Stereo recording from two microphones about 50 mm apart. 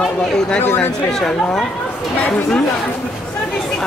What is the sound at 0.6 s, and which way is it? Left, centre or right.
Speech, left.